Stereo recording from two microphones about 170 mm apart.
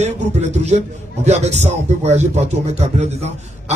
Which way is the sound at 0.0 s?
40° right (ahead or behind).